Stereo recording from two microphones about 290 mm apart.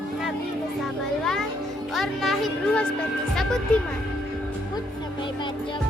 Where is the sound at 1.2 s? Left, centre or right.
Centre.